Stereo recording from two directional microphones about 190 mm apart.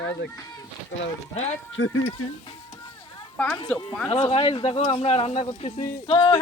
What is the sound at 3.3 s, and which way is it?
Speech, 10° left (ahead or behind).